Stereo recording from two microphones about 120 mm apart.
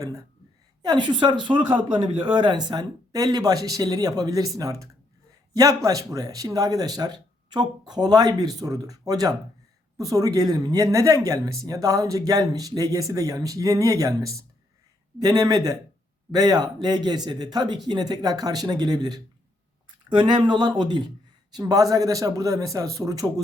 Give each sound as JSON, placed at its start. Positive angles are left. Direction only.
{"t": 0.0, "sound": "speech", "side_deg": -30}
{"t": 0.8, "sound": "speech", "side_deg": -40}